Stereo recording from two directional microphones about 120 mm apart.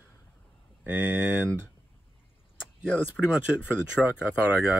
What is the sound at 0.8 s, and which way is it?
Speech, 15° right (ahead or behind).